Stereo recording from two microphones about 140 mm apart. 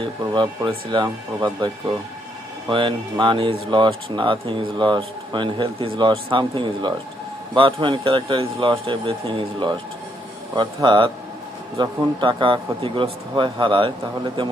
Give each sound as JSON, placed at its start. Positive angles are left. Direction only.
{"t": 0.0, "sound": "speech", "side_deg": -35}
{"t": 2.6, "sound": "speech", "side_deg": -35}